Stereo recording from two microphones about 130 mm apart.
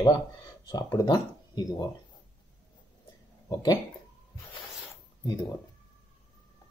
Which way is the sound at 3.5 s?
30° left (ahead or behind).